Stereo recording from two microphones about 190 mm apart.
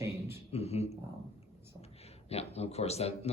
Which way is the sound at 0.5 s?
35° left (ahead or behind).